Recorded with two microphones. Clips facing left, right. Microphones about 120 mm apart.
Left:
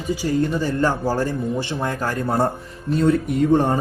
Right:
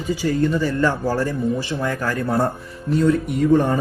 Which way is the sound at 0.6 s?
40° left (ahead or behind).